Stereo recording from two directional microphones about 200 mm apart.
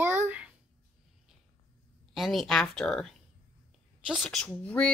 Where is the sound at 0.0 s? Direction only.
10° right (ahead or behind).